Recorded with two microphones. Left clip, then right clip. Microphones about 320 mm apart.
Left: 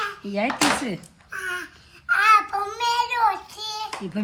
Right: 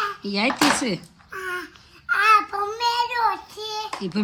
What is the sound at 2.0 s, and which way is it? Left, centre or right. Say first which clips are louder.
Child singing: even; left.